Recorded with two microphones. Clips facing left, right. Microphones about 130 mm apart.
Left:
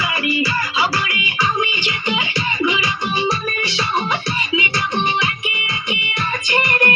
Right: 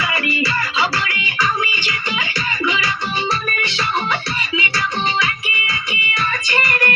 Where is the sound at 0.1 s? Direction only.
10° left (ahead or behind).